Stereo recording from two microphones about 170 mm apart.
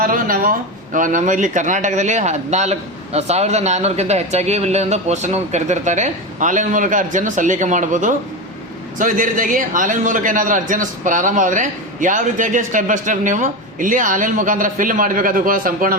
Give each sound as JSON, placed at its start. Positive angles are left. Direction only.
{"t": 0.0, "sound": "speech", "side_deg": -55}